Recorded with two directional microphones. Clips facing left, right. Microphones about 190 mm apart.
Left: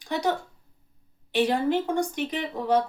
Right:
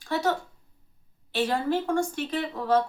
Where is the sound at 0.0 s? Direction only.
15° left (ahead or behind).